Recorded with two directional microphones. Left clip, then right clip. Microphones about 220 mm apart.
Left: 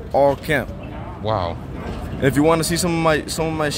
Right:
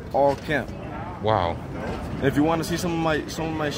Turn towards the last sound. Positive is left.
turn(degrees=50)  # may be behind; listen again after turning